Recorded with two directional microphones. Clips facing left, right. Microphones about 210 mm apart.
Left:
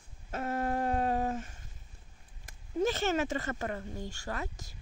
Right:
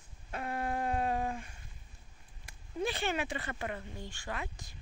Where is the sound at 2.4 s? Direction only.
45° left (ahead or behind).